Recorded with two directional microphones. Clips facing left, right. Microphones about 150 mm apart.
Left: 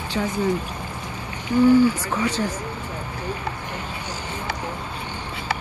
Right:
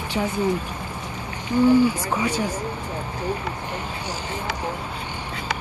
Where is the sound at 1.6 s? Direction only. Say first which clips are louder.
Left 1 dB; 15° right (ahead or behind).